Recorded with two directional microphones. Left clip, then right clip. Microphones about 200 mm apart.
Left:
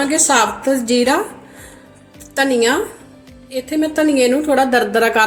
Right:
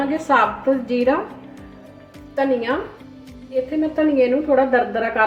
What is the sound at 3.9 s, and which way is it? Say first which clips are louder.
A woman's voice: left 3 dB; 65° left (ahead or behind).